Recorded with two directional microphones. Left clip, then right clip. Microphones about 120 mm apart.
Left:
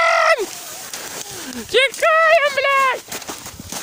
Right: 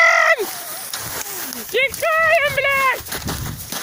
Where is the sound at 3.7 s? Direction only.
30° right (ahead or behind).